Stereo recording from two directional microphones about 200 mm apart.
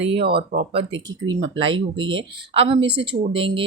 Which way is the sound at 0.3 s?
50° right (ahead or behind).